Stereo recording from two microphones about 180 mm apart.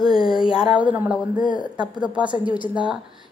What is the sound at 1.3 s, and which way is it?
Speech, 50° left (ahead or behind).